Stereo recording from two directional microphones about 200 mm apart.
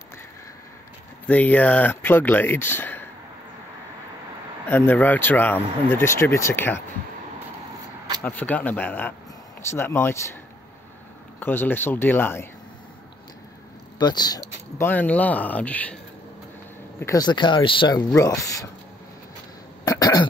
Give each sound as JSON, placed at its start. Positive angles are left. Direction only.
{"t": 1.2, "sound": "speech", "side_deg": 5}
{"t": 4.6, "sound": "speech", "side_deg": 10}
{"t": 8.2, "sound": "speech", "side_deg": 10}
{"t": 11.3, "sound": "speech", "side_deg": 10}
{"t": 13.9, "sound": "a sound", "side_deg": 20}
{"t": 14.9, "sound": "speech", "side_deg": 10}
{"t": 17.0, "sound": "speech", "side_deg": 20}
{"t": 19.8, "sound": "cough", "side_deg": 20}